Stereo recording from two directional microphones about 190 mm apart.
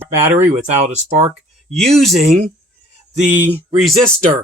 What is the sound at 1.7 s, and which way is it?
Speech, centre (ahead or behind).